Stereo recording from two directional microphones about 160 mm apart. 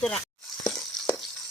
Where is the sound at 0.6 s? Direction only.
5° left (ahead or behind).